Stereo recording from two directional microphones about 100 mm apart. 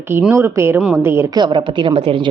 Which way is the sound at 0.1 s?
20° right (ahead or behind).